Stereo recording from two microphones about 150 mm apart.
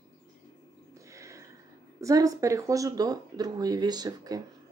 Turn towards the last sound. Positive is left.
turn(degrees=-25)  # may be behind; listen again after turning